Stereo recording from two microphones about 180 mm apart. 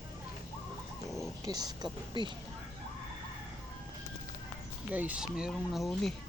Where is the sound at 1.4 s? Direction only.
20° right (ahead or behind).